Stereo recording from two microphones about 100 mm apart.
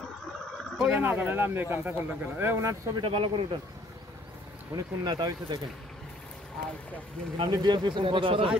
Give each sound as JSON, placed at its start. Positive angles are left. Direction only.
{"t": 0.7, "sound": "speech", "side_deg": -10}
{"t": 3.0, "sound": "speech", "side_deg": -60}
{"t": 4.7, "sound": "speech", "side_deg": -40}
{"t": 7.3, "sound": "speech", "side_deg": -50}